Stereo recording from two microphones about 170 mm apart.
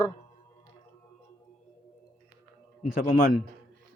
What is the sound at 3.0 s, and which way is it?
Speech, 65° left (ahead or behind).